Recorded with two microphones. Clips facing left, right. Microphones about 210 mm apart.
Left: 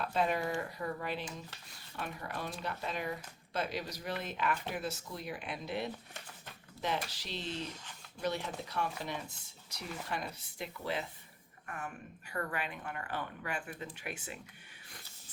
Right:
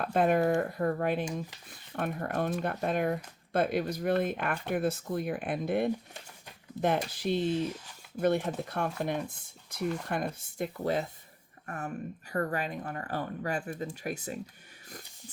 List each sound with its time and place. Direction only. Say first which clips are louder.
0.0 s speech: right 7 dB; 50° right (ahead or behind)